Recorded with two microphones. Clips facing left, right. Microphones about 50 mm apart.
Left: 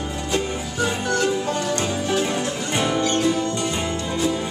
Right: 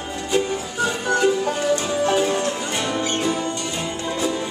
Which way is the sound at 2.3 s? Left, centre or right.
Centre.